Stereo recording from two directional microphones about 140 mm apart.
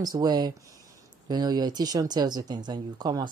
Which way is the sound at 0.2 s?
30° right (ahead or behind).